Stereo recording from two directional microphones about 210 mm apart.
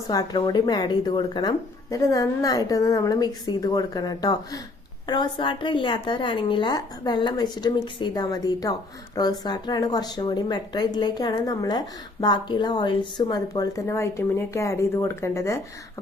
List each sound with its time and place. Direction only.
0.1 s a woman's voice: 15° left (ahead or behind)